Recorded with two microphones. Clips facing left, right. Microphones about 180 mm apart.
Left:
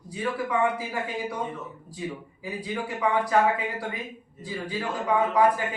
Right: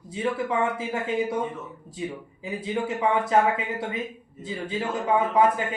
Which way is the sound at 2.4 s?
25° right (ahead or behind).